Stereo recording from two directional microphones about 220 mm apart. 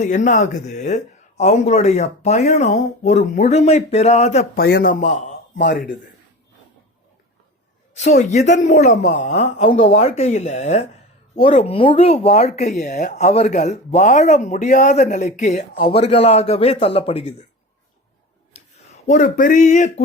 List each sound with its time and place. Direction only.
0.0 s speech: 35° left (ahead or behind)
4.6 s speech: 45° left (ahead or behind)
5.5 s speech: 45° left (ahead or behind)
7.9 s speech: 30° left (ahead or behind)
18.5 s a sound: 30° left (ahead or behind)
19.0 s speech: 35° left (ahead or behind)